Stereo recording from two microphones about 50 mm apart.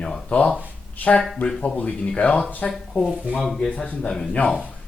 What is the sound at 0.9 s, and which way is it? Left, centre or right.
Speech, left.